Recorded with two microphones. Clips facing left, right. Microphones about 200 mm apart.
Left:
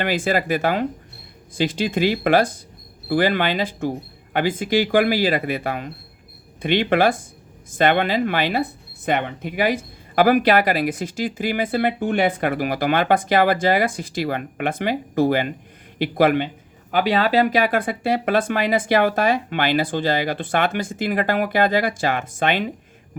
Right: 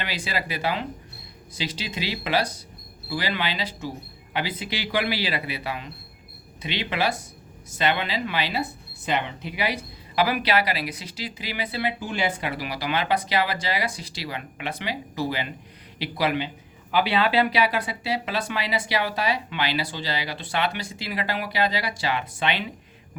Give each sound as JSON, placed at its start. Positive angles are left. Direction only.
{"t": 0.0, "sound": "speech", "side_deg": 50}